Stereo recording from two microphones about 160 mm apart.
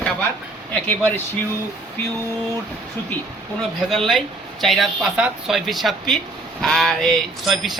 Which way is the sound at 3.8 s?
Centre (ahead or behind).